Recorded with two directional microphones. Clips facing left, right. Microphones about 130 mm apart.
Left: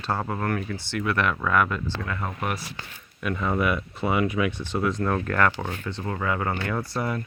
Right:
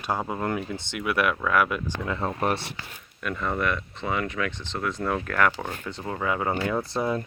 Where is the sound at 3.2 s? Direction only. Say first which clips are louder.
Left 2 dB; 5° left (ahead or behind); by 7.2 s 20° right (ahead or behind).